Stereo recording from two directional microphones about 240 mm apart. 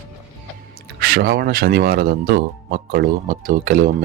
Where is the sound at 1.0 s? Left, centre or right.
Right.